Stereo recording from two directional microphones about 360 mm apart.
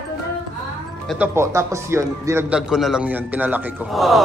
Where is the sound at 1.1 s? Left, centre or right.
Centre.